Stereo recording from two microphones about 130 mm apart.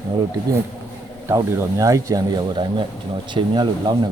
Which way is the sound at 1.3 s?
25° right (ahead or behind).